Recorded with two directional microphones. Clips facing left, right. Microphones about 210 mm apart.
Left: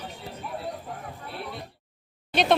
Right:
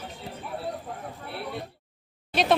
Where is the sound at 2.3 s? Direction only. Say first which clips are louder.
Left 1 dB; 5° right (ahead or behind).